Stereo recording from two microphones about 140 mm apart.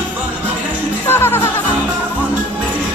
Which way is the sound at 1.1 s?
15° left (ahead or behind).